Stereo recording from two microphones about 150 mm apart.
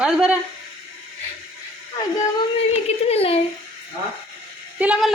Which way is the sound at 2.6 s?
45° left (ahead or behind).